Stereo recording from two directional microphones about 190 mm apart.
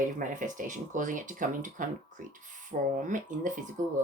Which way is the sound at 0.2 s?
40° right (ahead or behind).